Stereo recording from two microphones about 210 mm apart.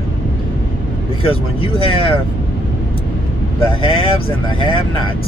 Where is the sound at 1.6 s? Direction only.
25° left (ahead or behind).